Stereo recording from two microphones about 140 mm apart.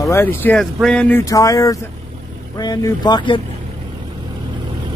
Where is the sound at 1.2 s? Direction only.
25° left (ahead or behind).